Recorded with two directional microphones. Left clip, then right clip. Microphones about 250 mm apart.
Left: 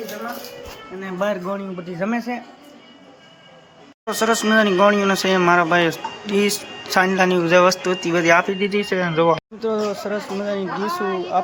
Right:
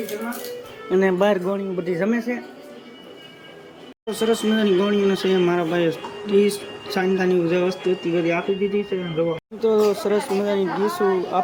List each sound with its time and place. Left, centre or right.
1.2 s speech: centre
4.0 s speech: centre
8.4 s speech: left
9.6 s speech: centre